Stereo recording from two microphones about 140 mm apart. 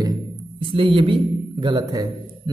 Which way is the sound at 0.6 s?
40° right (ahead or behind).